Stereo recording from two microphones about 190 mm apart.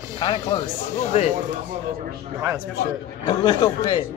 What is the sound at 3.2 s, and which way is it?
Speech, 20° left (ahead or behind).